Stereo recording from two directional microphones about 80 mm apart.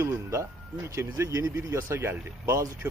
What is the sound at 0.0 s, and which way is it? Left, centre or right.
Speech, right.